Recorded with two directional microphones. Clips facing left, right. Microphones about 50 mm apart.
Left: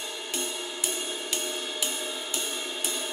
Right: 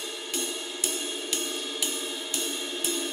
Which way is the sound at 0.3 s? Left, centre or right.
Centre.